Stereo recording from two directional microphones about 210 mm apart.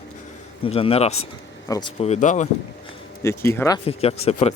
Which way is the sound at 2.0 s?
35° left (ahead or behind).